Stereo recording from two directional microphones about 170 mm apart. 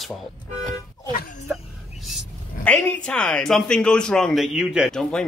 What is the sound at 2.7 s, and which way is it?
A man's voice, 10° left (ahead or behind).